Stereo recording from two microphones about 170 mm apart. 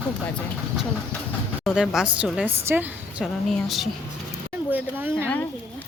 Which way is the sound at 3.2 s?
Centre (ahead or behind).